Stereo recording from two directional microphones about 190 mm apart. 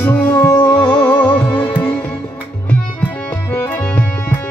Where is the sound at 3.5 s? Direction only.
10° left (ahead or behind).